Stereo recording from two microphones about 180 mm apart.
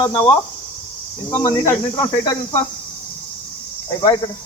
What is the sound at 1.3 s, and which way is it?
Speech, 15° left (ahead or behind).